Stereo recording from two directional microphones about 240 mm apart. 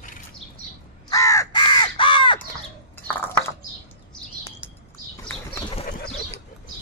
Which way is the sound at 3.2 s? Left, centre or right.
Centre.